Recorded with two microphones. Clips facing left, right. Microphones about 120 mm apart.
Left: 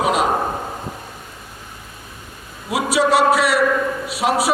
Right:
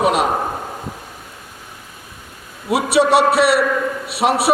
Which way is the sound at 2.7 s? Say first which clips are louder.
Right 3 dB; 65° right (ahead or behind).